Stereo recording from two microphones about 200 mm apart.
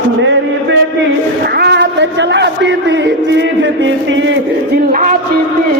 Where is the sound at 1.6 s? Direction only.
55° right (ahead or behind).